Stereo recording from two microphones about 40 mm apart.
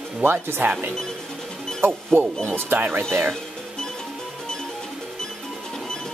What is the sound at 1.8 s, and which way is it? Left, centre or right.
Speech, right.